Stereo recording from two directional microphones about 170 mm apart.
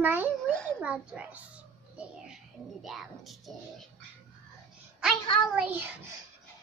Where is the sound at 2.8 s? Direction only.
Centre (ahead or behind).